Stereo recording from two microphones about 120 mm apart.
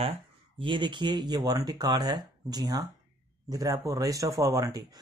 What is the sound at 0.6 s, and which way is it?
Speech, 45° right (ahead or behind).